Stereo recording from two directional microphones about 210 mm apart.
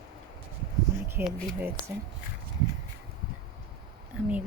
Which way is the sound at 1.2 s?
45° right (ahead or behind).